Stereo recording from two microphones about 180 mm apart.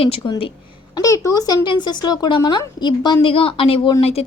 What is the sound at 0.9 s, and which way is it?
A woman's voice, 15° left (ahead or behind).